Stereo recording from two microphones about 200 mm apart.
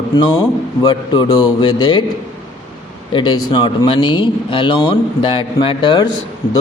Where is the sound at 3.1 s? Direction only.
20° left (ahead or behind).